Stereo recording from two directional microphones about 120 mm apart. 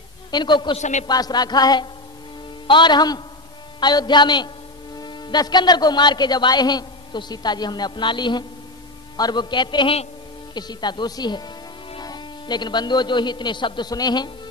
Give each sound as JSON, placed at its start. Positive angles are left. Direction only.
{"t": 0.3, "sound": "a man's voice", "side_deg": 40}
{"t": 0.7, "sound": "a man's voice", "side_deg": 80}
{"t": 1.0, "sound": "a man's voice", "side_deg": 35}